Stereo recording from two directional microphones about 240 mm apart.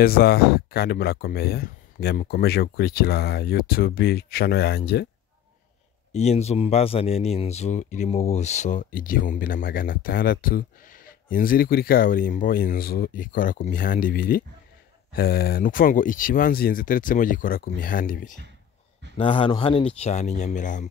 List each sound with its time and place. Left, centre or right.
0.0 s speech: left
6.1 s speech: left
19.1 s speech: left